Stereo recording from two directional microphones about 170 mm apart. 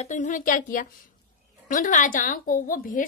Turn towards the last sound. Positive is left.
turn(degrees=55)  # may be behind; listen again after turning